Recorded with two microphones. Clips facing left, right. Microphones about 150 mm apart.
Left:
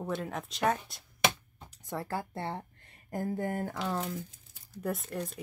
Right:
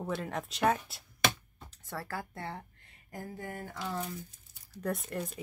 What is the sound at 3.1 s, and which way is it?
Speech, 50° left (ahead or behind).